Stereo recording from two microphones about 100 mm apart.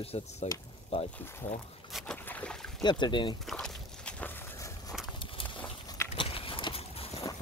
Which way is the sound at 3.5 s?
10° left (ahead or behind).